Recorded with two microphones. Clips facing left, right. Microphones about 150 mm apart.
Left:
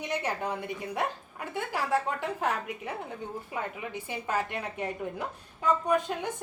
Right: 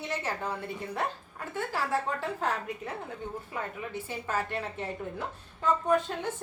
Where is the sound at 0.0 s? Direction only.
15° left (ahead or behind).